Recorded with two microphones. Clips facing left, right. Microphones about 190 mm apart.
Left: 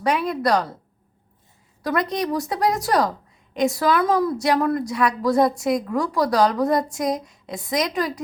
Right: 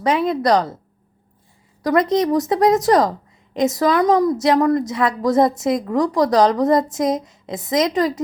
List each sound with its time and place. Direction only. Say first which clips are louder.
0.0 s a woman's voice: right 4 dB; 20° right (ahead or behind)
2.0 s a woman's voice: right 7 dB; 20° right (ahead or behind)